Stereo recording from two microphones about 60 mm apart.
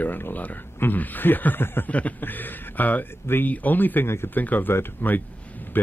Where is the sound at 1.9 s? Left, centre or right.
Left.